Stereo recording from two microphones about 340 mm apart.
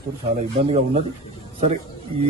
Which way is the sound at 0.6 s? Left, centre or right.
Centre.